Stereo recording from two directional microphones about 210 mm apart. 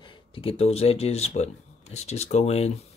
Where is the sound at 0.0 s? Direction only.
25° left (ahead or behind).